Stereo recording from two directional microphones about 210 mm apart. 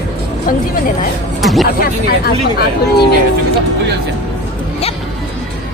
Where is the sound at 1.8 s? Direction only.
45° left (ahead or behind).